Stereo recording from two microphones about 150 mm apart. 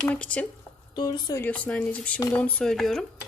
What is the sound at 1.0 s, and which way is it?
Speech, 30° left (ahead or behind).